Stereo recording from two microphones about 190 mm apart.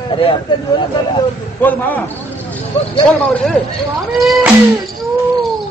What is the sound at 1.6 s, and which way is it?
Speech, 10° left (ahead or behind).